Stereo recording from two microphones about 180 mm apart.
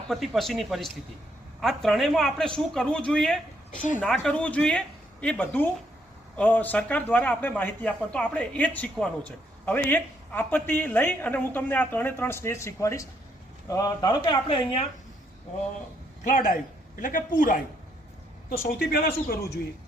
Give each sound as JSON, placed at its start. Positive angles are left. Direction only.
{"t": 0.1, "sound": "a man's voice", "side_deg": 0}
{"t": 16.2, "sound": "speech", "side_deg": 45}
{"t": 18.7, "sound": "a man's voice", "side_deg": 55}